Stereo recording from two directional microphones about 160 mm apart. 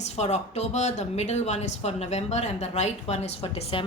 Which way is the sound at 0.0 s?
45° left (ahead or behind).